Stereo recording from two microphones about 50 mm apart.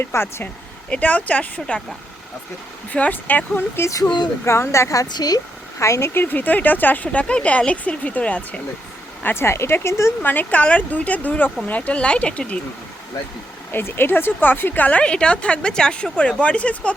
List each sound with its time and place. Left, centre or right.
0.0 s speech: left
0.9 s a woman's voice: left
2.9 s speech: left
3.8 s speech: left
5.8 s speech: left
6.1 s a woman's voice: left
9.2 s speech: left
10.2 s speech: left
10.6 s a woman's voice: left
13.7 s a woman's voice: left